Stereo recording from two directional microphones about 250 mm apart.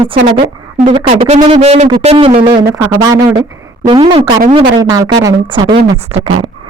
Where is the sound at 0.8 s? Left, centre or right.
Right.